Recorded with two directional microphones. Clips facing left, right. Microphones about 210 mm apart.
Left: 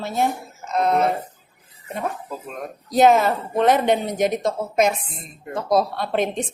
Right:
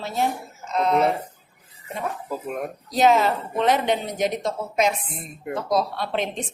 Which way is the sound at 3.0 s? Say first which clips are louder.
Left 3 dB; 50° left (ahead or behind).